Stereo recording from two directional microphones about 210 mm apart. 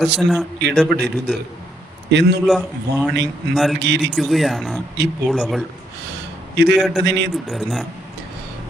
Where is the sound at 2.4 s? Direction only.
Centre (ahead or behind).